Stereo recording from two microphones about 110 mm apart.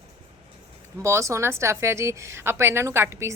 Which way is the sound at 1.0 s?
25° right (ahead or behind).